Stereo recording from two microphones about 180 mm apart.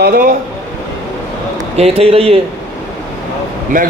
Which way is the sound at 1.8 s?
35° right (ahead or behind).